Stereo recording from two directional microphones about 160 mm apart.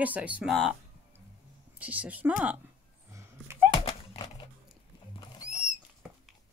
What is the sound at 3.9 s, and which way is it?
Dog, 30° left (ahead or behind).